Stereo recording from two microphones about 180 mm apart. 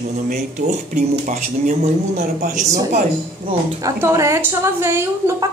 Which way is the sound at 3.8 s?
15° right (ahead or behind).